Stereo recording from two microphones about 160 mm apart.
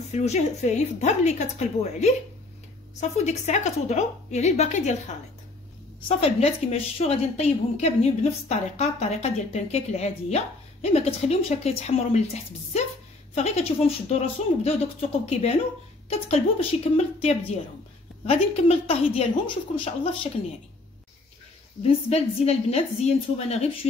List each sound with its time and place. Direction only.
0.1 s a woman's voice: 45° left (ahead or behind)
21.8 s a woman's voice: 40° left (ahead or behind)